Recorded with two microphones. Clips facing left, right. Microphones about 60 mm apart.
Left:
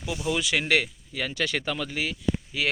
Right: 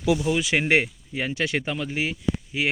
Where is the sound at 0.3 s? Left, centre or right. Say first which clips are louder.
Right 3 dB; right.